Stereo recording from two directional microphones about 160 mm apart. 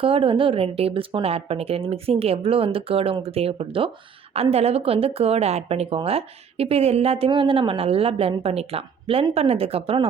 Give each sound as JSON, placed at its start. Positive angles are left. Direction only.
{"t": 0.0, "sound": "speech", "side_deg": -35}